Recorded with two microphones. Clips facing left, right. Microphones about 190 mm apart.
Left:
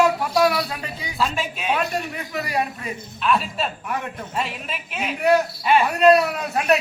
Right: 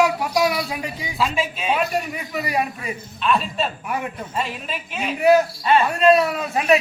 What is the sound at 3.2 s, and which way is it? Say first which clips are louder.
A man's voice: right 1 dB; 5° left (ahead or behind).